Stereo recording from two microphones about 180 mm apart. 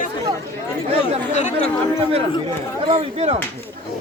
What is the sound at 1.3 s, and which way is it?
Speech, 40° left (ahead or behind).